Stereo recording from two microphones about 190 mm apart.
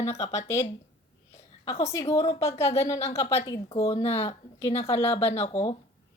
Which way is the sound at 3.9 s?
35° left (ahead or behind).